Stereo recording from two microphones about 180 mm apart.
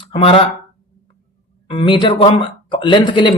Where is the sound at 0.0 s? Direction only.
30° left (ahead or behind).